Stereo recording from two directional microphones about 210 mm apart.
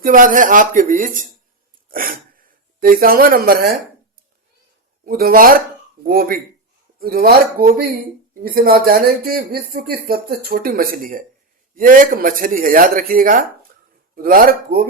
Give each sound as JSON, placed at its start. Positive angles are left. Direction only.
{"t": 0.0, "sound": "speech", "side_deg": -40}
{"t": 1.9, "sound": "sneeze", "side_deg": -45}
{"t": 2.8, "sound": "speech", "side_deg": -45}
{"t": 5.0, "sound": "speech", "side_deg": -45}